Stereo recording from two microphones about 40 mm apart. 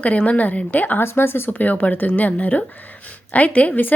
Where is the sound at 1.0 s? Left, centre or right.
Left.